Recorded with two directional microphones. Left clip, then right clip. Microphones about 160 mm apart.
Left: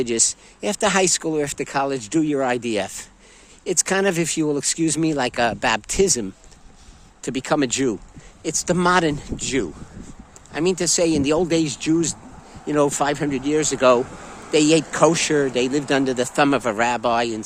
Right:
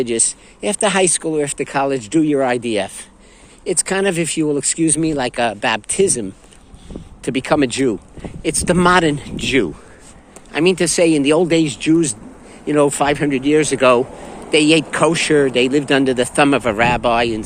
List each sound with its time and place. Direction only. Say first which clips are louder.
0.0 s speech: right 2 dB; 45° left (ahead or behind)
7.2 s speech: right 5 dB; 30° left (ahead or behind)
8.4 s speech: right 5 dB; 20° left (ahead or behind)